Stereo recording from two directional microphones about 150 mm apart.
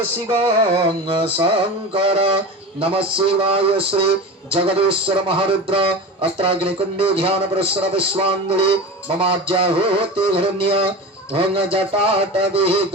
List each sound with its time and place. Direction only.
0.3 s a man's voice: 30° right (ahead or behind)